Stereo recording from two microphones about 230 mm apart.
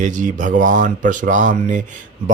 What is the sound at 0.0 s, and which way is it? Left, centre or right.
Speech, right.